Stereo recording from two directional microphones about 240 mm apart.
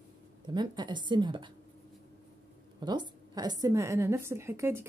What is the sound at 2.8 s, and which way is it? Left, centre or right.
A woman's voice, centre.